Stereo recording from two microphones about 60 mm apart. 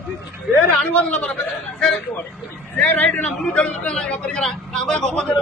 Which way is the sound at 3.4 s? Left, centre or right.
Centre.